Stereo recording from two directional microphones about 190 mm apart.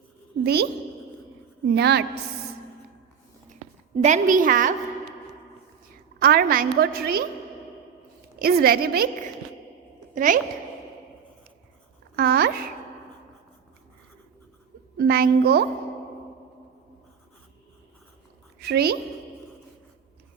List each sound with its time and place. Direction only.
0.4 s a child's voice: 55° right (ahead or behind)
3.9 s a woman's voice: 40° right (ahead or behind)
6.1 s a woman's voice: 50° right (ahead or behind)
8.4 s a woman's voice: 50° right (ahead or behind)
10.2 s a woman's voice: 45° right (ahead or behind)
12.1 s a child's voice: 55° right (ahead or behind)
14.9 s a child's voice: 55° right (ahead or behind)
18.6 s a child's voice: 60° right (ahead or behind)